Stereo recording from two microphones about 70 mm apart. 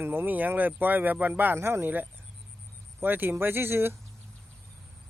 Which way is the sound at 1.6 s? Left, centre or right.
Right.